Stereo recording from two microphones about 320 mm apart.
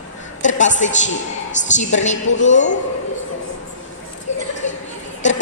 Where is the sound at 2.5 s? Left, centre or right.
Left.